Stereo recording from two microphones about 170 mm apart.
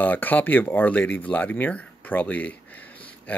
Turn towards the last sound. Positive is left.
turn(degrees=10)  # may be behind; listen again after turning